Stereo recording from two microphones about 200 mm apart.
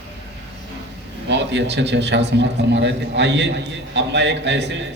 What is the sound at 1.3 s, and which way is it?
A man's voice, 60° right (ahead or behind).